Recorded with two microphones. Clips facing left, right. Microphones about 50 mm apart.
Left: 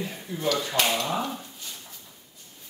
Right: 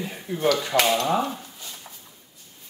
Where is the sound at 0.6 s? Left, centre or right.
Right.